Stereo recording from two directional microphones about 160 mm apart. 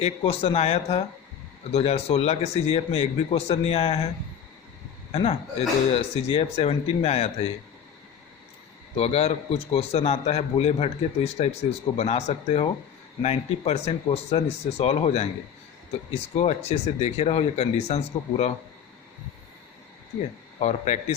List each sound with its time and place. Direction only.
0.0 s a man's voice: 40° left (ahead or behind)
5.1 s a man's voice: 40° left (ahead or behind)
9.0 s a man's voice: 40° left (ahead or behind)
16.4 s speech: 45° left (ahead or behind)
20.6 s speech: 45° left (ahead or behind)